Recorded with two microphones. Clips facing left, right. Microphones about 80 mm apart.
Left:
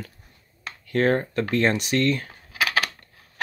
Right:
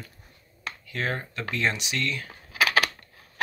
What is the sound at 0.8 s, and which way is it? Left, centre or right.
Speech, left.